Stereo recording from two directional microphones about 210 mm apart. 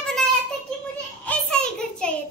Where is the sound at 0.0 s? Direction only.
5° left (ahead or behind).